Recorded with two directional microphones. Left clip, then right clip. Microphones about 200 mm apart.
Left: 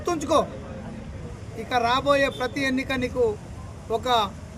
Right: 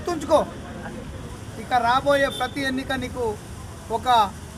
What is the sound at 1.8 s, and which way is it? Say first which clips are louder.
Speech: right 1 dB; 20° left (ahead or behind).